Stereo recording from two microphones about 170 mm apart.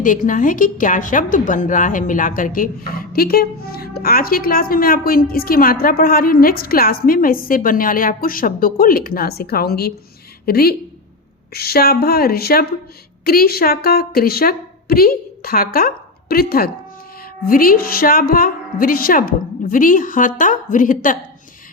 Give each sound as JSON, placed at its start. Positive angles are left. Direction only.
{"t": 0.0, "sound": "a woman's voice", "side_deg": 50}